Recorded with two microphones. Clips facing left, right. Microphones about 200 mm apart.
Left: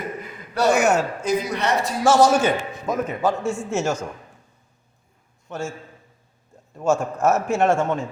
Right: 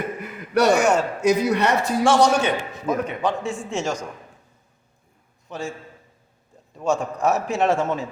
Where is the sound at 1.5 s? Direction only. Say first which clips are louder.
Right 4 dB; 60° right (ahead or behind).